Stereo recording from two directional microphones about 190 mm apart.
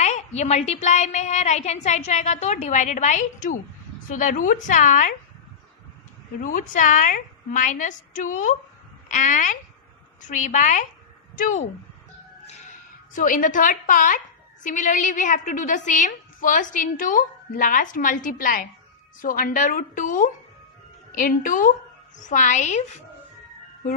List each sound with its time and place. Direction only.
0.0 s a woman's voice: 35° left (ahead or behind)
6.4 s a woman's voice: 45° left (ahead or behind)
13.1 s a woman's voice: 45° left (ahead or behind)